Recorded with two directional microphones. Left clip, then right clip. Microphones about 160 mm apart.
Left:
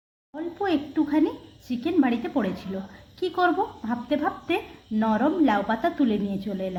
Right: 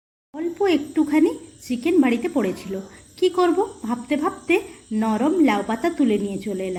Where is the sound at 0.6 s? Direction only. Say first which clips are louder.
Right 5 dB; 15° right (ahead or behind).